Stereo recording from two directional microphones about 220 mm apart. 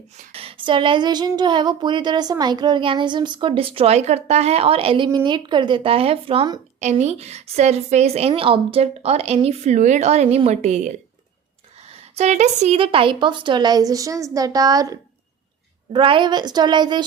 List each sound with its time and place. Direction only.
0.3 s a woman's voice: 25° right (ahead or behind)
12.1 s a woman's voice: 30° right (ahead or behind)